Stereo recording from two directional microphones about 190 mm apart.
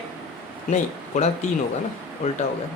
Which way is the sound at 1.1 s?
40° left (ahead or behind).